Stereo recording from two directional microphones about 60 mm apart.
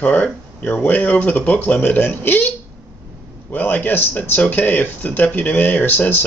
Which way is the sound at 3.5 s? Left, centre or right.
Left.